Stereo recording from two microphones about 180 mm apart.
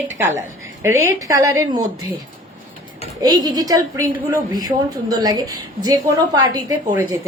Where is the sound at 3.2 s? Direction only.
20° right (ahead or behind).